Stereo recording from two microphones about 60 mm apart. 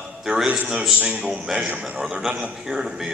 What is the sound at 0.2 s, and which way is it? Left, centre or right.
Speech, centre.